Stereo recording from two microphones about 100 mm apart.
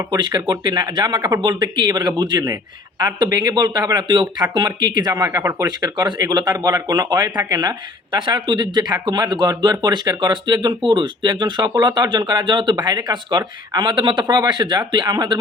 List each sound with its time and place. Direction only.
0.1 s speech: 45° right (ahead or behind)
13.9 s speech: 55° right (ahead or behind)